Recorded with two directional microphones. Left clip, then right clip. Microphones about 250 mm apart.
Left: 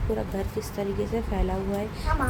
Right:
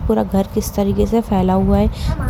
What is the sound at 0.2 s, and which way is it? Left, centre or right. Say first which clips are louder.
Speech: right 12 dB; right.